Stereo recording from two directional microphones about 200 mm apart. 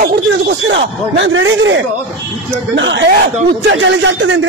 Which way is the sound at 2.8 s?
60° right (ahead or behind).